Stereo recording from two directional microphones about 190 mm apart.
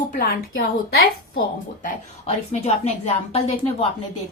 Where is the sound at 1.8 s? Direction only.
35° left (ahead or behind).